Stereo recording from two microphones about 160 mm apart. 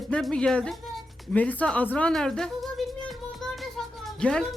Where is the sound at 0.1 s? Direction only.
5° left (ahead or behind).